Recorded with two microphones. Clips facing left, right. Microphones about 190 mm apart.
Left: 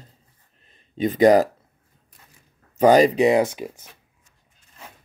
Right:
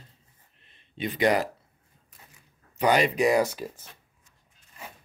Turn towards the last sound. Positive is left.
turn(degrees=15)  # may be behind; listen again after turning